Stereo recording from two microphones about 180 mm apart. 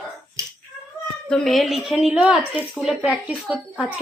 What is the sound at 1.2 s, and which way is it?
Speech, 5° left (ahead or behind).